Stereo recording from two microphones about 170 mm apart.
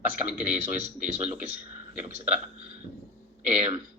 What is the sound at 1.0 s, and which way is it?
Speech, 50° right (ahead or behind).